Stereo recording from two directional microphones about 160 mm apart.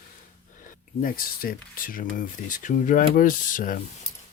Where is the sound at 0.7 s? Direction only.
60° left (ahead or behind).